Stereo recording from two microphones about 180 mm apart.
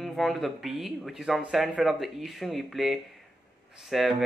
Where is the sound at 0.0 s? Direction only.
Centre (ahead or behind).